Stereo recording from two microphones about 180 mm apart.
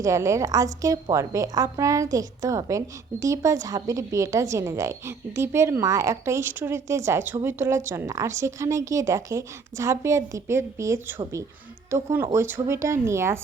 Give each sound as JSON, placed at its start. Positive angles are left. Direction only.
{"t": 0.0, "sound": "a woman's voice", "side_deg": -15}